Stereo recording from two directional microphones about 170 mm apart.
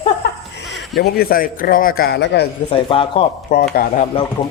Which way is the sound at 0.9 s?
65° left (ahead or behind).